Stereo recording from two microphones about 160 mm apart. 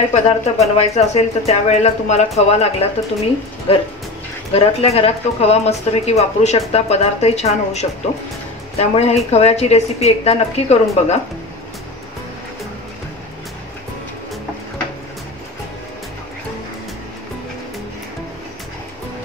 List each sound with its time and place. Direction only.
0.1 s a woman's voice: 45° left (ahead or behind)